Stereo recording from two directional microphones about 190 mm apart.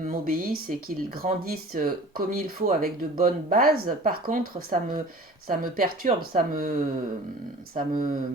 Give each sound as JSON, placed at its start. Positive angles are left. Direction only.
{"t": 0.0, "sound": "speech", "side_deg": -45}
{"t": 7.8, "sound": "speech", "side_deg": -45}